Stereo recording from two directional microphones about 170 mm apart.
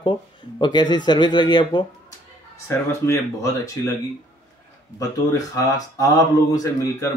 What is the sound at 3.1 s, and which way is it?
Speech, 20° left (ahead or behind).